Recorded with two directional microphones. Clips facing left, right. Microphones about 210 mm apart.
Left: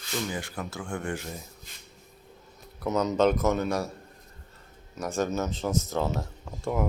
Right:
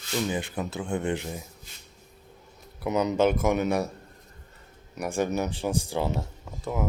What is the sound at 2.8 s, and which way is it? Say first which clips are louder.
Speech: even; 15° right (ahead or behind).